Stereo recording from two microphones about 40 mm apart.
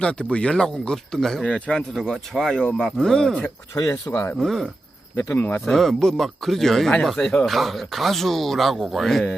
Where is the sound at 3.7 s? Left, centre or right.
Left.